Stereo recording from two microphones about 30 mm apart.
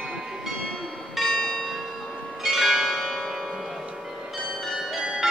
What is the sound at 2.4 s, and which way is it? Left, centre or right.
Change ringing, centre.